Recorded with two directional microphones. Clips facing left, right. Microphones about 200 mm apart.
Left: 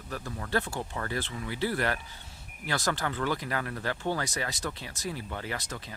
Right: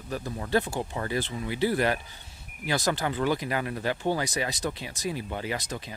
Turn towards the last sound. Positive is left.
turn(degrees=-15)  # may be behind; listen again after turning